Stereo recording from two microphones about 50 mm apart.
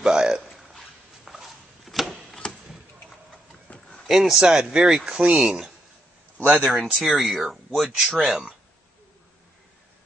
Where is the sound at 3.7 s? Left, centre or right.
Left.